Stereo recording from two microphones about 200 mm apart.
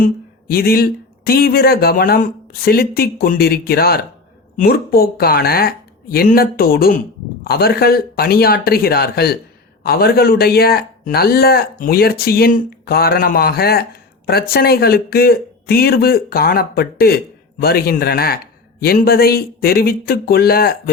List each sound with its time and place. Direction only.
0.0 s speech: 50° left (ahead or behind)